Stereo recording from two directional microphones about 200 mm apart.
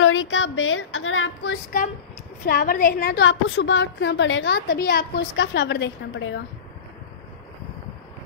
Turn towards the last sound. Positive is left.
turn(degrees=70)  # may be behind; listen again after turning